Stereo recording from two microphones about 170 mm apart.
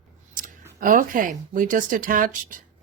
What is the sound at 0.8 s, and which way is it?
Speech, 55° right (ahead or behind).